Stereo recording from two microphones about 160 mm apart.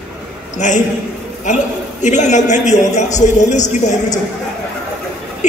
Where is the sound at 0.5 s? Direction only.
50° left (ahead or behind).